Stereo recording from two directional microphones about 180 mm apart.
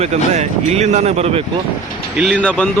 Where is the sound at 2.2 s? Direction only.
5° left (ahead or behind).